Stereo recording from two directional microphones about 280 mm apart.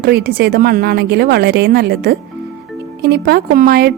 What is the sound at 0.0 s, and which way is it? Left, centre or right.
A woman's voice, right.